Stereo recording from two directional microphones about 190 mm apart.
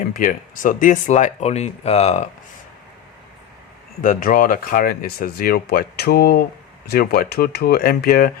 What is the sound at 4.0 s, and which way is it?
Speech, 45° left (ahead or behind).